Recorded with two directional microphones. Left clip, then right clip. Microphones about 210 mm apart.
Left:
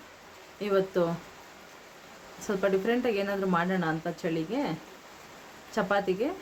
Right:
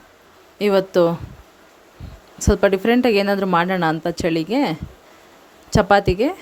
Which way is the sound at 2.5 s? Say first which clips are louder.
Right 11 dB; 50° right (ahead or behind).